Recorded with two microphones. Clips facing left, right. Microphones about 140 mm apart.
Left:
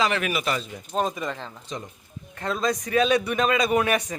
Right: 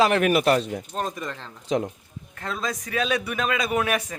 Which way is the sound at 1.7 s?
90° right.